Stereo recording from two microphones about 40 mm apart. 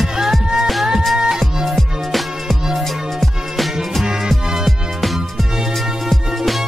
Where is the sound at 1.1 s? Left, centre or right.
Centre.